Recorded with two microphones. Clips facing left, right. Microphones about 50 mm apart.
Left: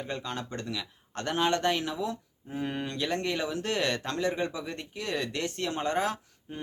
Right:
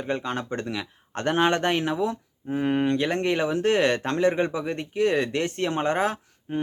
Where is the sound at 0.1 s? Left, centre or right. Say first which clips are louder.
Right 10 dB; right.